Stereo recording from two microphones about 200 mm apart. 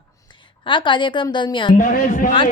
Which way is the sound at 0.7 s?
25° left (ahead or behind).